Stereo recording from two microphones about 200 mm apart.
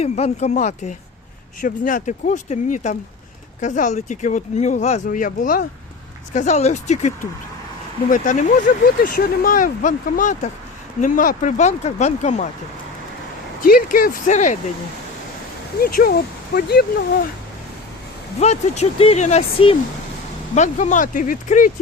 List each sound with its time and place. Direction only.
0.0 s speech: 30° left (ahead or behind)
8.1 s speech: 40° left (ahead or behind)
13.6 s speech: 45° left (ahead or behind)
15.8 s speech: 50° left (ahead or behind)
18.3 s speech: 35° left (ahead or behind)